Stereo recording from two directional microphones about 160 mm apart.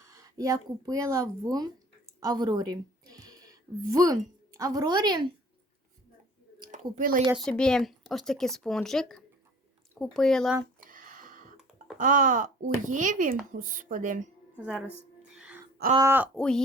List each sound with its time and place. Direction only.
0.1 s a woman's voice: 20° right (ahead or behind)
6.9 s speech: 60° right (ahead or behind)
7.3 s speech: 5° left (ahead or behind)
10.8 s a sound: 55° right (ahead or behind)
11.9 s speech: 55° right (ahead or behind)
14.5 s speech: 5° right (ahead or behind)
15.3 s gasp: 5° right (ahead or behind)
16.0 s speech: 15° right (ahead or behind)
16.3 s speech: 5° left (ahead or behind)